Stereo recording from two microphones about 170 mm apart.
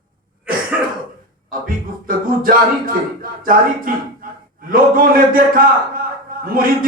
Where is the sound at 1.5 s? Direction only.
55° right (ahead or behind).